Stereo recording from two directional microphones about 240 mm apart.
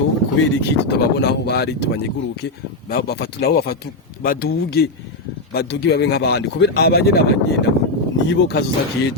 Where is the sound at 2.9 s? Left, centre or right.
Left.